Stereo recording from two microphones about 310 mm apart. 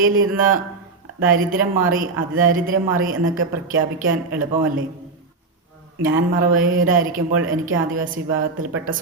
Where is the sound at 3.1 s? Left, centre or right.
Right.